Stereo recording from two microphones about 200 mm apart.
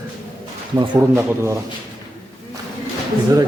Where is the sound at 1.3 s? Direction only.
15° right (ahead or behind).